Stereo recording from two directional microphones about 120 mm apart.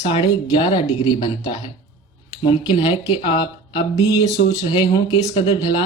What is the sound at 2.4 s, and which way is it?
Speech, 50° left (ahead or behind).